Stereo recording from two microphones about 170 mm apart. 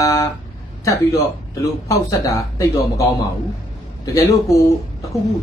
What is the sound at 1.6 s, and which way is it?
Speech, 20° left (ahead or behind).